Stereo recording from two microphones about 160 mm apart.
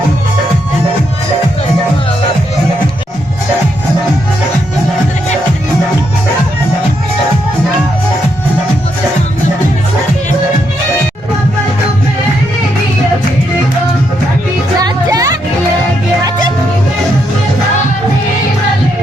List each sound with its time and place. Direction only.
14.8 s music: 20° right (ahead or behind)